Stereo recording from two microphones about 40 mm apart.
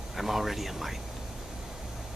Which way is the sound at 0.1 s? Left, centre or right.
Centre.